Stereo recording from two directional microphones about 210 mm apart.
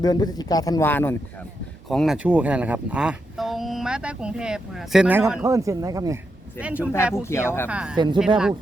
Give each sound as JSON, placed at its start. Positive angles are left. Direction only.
{"t": 0.0, "sound": "speech", "side_deg": 20}
{"t": 6.6, "sound": "speech", "side_deg": -5}
{"t": 7.2, "sound": "speech", "side_deg": 10}
{"t": 7.7, "sound": "speech", "side_deg": -5}
{"t": 7.9, "sound": "speech", "side_deg": -20}